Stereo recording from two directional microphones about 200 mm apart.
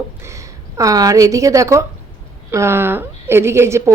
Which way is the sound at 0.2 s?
15° right (ahead or behind).